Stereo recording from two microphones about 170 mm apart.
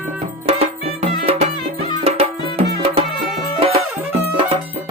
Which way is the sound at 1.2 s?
35° right (ahead or behind).